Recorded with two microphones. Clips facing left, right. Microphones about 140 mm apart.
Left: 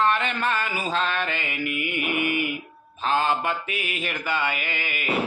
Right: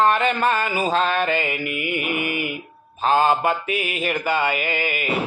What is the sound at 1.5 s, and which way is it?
Mantra, 5° right (ahead or behind).